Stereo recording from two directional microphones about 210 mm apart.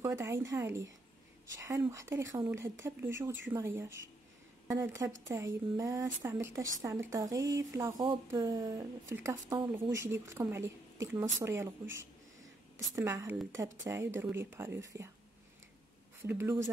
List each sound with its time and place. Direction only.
0.0 s a woman's voice: 15° right (ahead or behind)
16.2 s a woman's voice: 10° right (ahead or behind)